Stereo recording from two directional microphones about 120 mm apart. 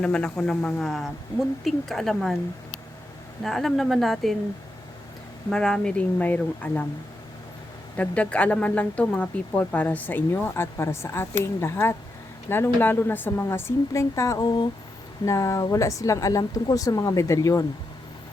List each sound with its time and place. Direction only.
0.0 s a woman's voice: 10° left (ahead or behind)
3.4 s a woman's voice: centre (ahead or behind)
5.5 s speech: 5° left (ahead or behind)
7.9 s a woman's voice: 10° left (ahead or behind); by 17.7 s 30° left (ahead or behind)